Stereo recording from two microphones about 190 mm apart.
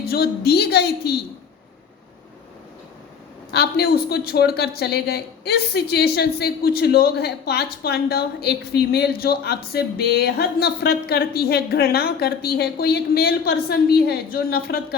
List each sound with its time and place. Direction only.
0.0 s a woman's voice: 55° left (ahead or behind)
3.5 s a woman's voice: 55° left (ahead or behind)